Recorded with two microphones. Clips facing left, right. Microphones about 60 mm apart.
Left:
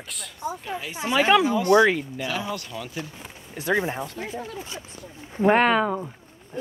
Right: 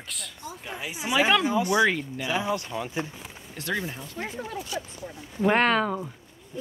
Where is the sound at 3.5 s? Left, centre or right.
Centre.